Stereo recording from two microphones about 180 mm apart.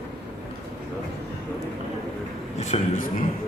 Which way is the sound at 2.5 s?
40° left (ahead or behind).